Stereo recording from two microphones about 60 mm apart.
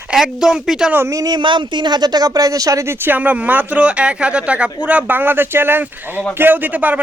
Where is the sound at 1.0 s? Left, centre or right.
Right.